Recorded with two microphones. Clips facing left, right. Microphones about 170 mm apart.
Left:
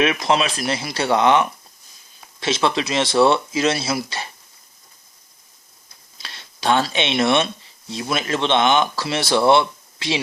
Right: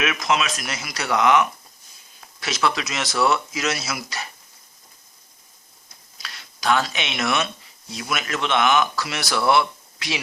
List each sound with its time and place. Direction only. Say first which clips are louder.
0.0 s speech: left 4 dB; 30° left (ahead or behind)
6.1 s a sound: left 1 dB; 25° left (ahead or behind)
7.9 s speech: left 5 dB; 30° left (ahead or behind)